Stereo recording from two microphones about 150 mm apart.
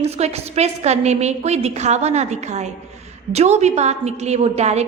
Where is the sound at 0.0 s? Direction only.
45° right (ahead or behind).